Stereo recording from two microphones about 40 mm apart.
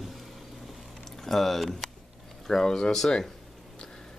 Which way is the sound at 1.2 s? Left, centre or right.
Centre.